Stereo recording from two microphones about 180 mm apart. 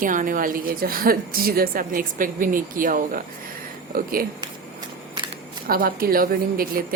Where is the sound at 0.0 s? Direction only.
45° right (ahead or behind).